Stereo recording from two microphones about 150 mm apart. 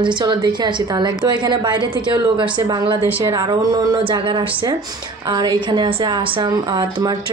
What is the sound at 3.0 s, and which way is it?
Speech, 20° right (ahead or behind).